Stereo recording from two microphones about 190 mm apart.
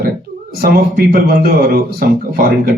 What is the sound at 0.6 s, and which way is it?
Speech, 55° right (ahead or behind).